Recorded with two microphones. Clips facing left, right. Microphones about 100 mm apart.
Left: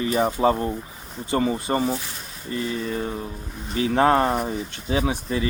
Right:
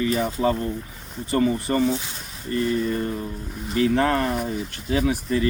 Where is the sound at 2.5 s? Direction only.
10° left (ahead or behind).